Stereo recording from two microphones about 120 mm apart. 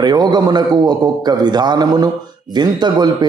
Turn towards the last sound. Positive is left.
turn(degrees=-35)  # may be behind; listen again after turning